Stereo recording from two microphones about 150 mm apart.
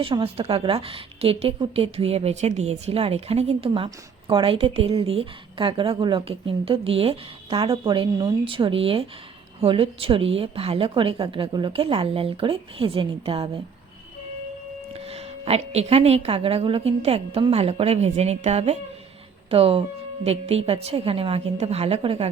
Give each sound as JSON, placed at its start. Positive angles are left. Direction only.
{"t": 0.0, "sound": "a woman's voice", "side_deg": -35}
{"t": 14.9, "sound": "a woman's voice", "side_deg": -40}